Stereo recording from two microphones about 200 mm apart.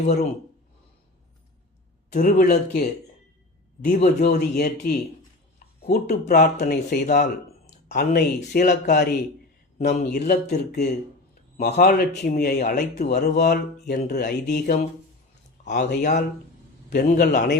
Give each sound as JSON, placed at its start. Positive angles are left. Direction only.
{"t": 2.1, "sound": "speech", "side_deg": 40}
{"t": 3.8, "sound": "speech", "side_deg": 50}
{"t": 5.5, "sound": "a sound", "side_deg": 50}
{"t": 6.2, "sound": "speech", "side_deg": 50}
{"t": 12.5, "sound": "speech", "side_deg": 40}
{"t": 15.6, "sound": "speech", "side_deg": 40}
{"t": 16.9, "sound": "speech", "side_deg": 50}